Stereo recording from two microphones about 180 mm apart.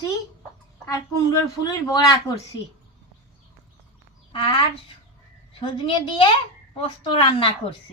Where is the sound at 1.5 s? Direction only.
20° left (ahead or behind).